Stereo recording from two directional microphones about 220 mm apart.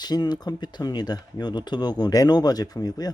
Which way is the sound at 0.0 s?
20° left (ahead or behind).